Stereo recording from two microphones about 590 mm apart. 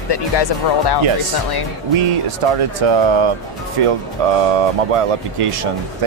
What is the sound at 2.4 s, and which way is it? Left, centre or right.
Speech, right.